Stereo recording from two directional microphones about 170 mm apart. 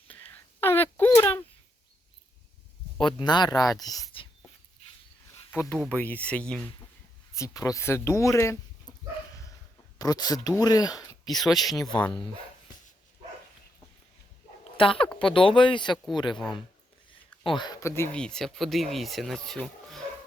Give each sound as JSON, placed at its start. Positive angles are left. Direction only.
{"t": 0.1, "sound": "a sound", "side_deg": 15}
{"t": 3.2, "sound": "speech", "side_deg": 25}
{"t": 5.5, "sound": "speech", "side_deg": 10}
{"t": 7.3, "sound": "speech", "side_deg": 20}
{"t": 10.0, "sound": "speech", "side_deg": 20}
{"t": 11.3, "sound": "speech", "side_deg": 0}
{"t": 14.6, "sound": "dog", "side_deg": 30}
{"t": 15.2, "sound": "speech", "side_deg": 30}
{"t": 17.6, "sound": "speech", "side_deg": 20}